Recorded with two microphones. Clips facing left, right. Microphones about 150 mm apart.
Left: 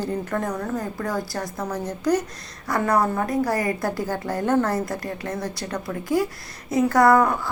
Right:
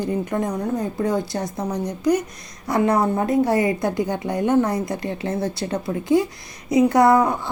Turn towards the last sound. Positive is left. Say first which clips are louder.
# right 1 dB
turn(degrees=-20)  # may be behind; listen again after turning